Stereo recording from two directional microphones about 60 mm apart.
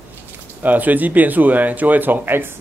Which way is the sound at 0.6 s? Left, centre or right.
Right.